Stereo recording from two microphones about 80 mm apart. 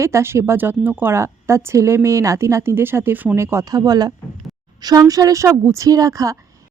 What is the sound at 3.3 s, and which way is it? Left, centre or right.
Speech, right.